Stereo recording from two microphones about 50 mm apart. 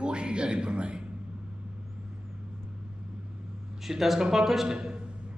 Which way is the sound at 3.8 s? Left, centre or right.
Centre.